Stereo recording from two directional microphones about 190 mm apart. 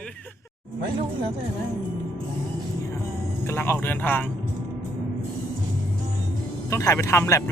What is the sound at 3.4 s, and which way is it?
Speech, 10° left (ahead or behind).